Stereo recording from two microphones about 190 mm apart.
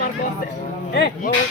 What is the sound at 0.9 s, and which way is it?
Speech, 55° left (ahead or behind).